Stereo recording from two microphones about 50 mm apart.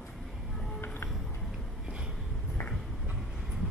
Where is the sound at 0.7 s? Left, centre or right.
Left.